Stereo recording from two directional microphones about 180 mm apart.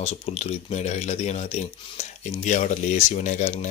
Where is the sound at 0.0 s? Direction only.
35° left (ahead or behind).